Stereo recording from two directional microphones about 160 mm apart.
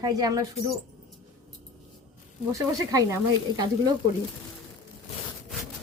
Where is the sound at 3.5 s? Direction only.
25° right (ahead or behind).